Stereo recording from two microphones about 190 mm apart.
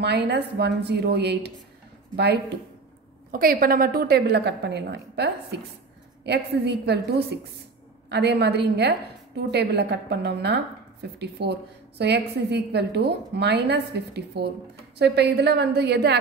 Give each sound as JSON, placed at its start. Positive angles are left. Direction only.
{"t": 0.0, "sound": "a woman's voice", "side_deg": -60}
{"t": 3.3, "sound": "a woman's voice", "side_deg": -50}